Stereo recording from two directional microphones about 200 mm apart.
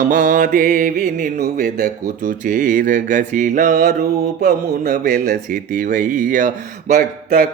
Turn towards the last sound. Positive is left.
turn(degrees=-45)  # may be behind; listen again after turning